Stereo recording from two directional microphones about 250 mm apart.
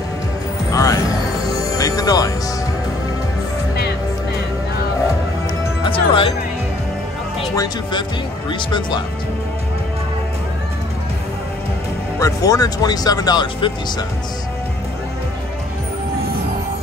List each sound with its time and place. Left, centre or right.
0.7 s music: centre
5.9 s music: left
7.5 s speech: centre
12.2 s speech: centre